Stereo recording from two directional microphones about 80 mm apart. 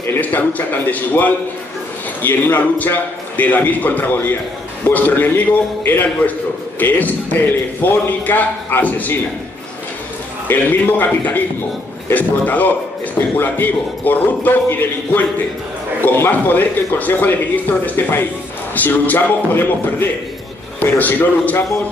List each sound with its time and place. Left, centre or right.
0.2 s a man's voice: centre
10.5 s a man's voice: left